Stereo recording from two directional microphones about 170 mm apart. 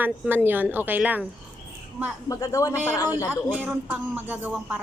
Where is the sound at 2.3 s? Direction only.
20° left (ahead or behind).